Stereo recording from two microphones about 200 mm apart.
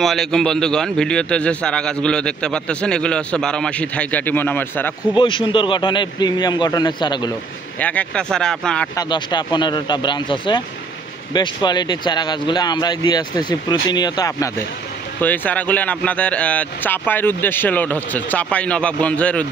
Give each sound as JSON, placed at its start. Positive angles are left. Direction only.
{"t": 0.0, "sound": "a man's voice", "side_deg": 0}
{"t": 5.1, "sound": "speech", "side_deg": 25}
{"t": 7.8, "sound": "a man's voice", "side_deg": 5}
{"t": 8.9, "sound": "speech", "side_deg": 20}